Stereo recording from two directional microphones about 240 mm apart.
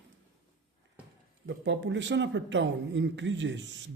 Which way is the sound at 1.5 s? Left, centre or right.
Right.